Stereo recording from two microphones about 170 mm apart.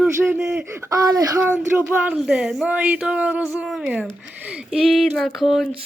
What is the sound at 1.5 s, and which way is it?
Speech, 10° right (ahead or behind).